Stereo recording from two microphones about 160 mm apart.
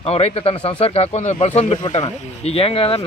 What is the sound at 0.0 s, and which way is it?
A man's voice, 40° left (ahead or behind).